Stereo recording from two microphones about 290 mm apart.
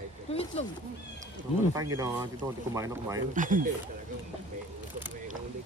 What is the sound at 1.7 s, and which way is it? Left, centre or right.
Speech, centre.